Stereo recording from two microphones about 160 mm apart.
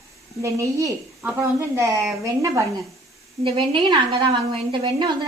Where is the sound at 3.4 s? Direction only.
35° right (ahead or behind).